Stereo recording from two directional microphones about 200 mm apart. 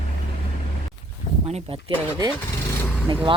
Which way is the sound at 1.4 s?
30° right (ahead or behind).